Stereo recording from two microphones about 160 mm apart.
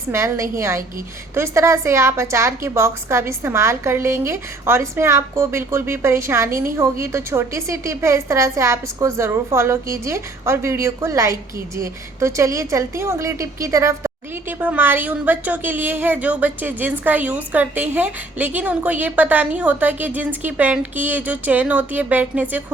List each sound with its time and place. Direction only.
0.1 s a woman's voice: 15° right (ahead or behind)